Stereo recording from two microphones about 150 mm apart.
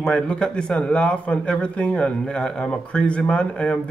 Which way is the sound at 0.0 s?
5° left (ahead or behind).